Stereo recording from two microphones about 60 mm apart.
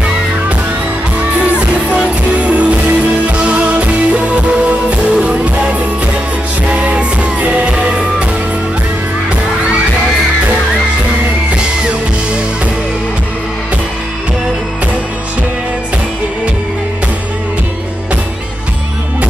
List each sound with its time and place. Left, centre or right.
1.4 s music: centre